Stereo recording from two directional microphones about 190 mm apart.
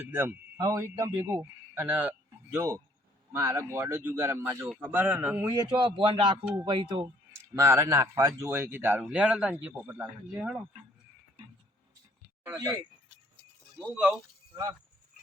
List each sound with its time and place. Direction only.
0.1 s speech: 10° right (ahead or behind)
5.5 s speech: 20° right (ahead or behind)
7.5 s speech: 15° right (ahead or behind)
12.5 s speech: 20° right (ahead or behind)
13.7 s speech: 5° right (ahead or behind)
14.5 s speech: 20° right (ahead or behind)